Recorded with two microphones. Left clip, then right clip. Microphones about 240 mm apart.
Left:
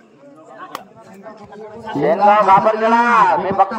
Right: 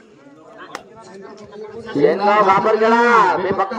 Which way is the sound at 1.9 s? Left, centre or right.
Left.